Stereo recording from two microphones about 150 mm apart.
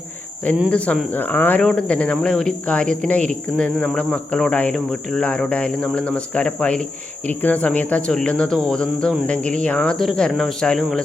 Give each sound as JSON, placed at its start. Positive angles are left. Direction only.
{"t": 0.7, "sound": "speech", "side_deg": 10}
{"t": 9.4, "sound": "speech", "side_deg": -55}
{"t": 9.6, "sound": "speech", "side_deg": 5}